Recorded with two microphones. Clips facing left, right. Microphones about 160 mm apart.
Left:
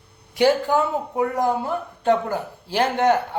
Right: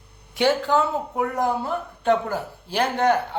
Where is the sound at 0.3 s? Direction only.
10° left (ahead or behind).